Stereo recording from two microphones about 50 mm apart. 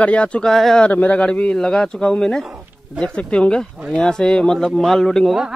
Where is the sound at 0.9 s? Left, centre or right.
Left; by 2.4 s centre.